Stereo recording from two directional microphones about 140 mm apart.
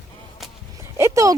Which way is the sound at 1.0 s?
20° right (ahead or behind).